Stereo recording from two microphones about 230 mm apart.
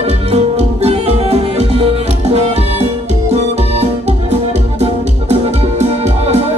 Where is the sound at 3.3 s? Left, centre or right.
Right.